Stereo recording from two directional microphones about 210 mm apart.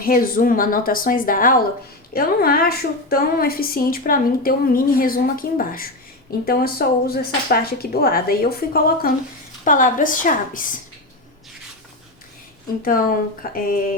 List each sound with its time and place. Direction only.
0.0 s a woman's voice: 45° left (ahead or behind)
12.8 s a woman's voice: 40° left (ahead or behind)